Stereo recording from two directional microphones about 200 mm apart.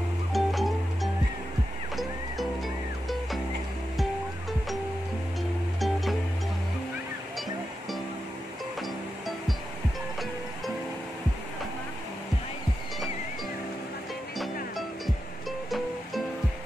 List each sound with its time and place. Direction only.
0.3 s music: centre (ahead or behind)
3.9 s music: centre (ahead or behind)
5.8 s music: centre (ahead or behind)
14.4 s music: centre (ahead or behind)